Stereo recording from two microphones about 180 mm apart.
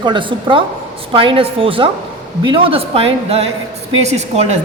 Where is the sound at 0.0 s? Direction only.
25° right (ahead or behind).